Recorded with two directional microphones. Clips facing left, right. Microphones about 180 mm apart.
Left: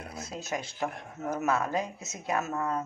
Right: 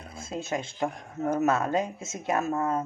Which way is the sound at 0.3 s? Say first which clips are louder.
Right 5 dB; 25° right (ahead or behind).